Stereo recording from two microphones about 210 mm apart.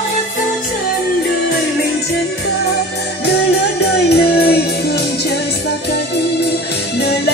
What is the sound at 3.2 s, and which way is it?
Music, 50° left (ahead or behind).